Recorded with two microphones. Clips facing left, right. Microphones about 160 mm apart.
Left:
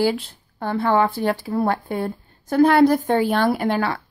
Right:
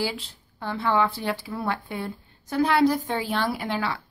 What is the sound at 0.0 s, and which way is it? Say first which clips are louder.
Speech: left 9 dB; 50° left (ahead or behind).